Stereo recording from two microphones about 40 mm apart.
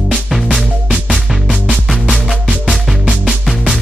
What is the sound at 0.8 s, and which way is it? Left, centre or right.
Music, right.